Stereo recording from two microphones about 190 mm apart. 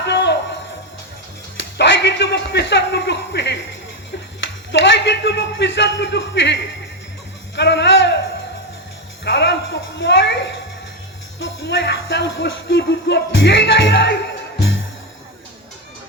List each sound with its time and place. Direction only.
0.0 s music: 70° left (ahead or behind)
1.5 s speech: 70° left (ahead or behind)
7.5 s music: 65° left (ahead or behind)
9.2 s music: 65° left (ahead or behind)
10.0 s a sound: 70° left (ahead or behind)
11.3 s speech: 70° left (ahead or behind)